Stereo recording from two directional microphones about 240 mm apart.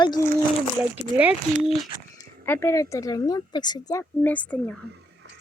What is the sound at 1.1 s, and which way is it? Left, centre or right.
Speech, centre.